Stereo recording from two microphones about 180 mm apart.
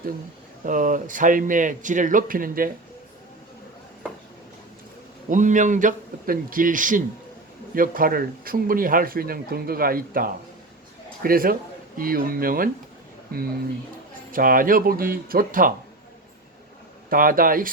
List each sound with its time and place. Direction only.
0.6 s speech: 45° right (ahead or behind)
5.3 s speech: 45° right (ahead or behind)
14.3 s speech: 50° right (ahead or behind)
17.1 s speech: 50° right (ahead or behind)